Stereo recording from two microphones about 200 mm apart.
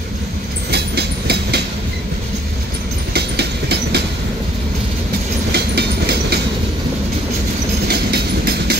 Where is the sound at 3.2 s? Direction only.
55° right (ahead or behind).